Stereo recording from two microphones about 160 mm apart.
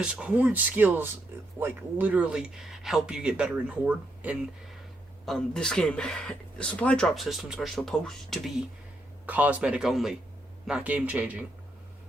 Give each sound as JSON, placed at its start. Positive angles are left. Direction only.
{"t": 0.0, "sound": "speech", "side_deg": -5}
{"t": 5.2, "sound": "speech", "side_deg": 5}
{"t": 9.2, "sound": "speech", "side_deg": -10}